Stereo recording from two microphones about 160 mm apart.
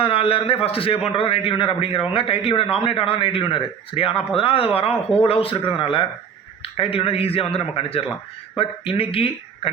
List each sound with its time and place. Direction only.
0.0 s a man's voice: 35° left (ahead or behind)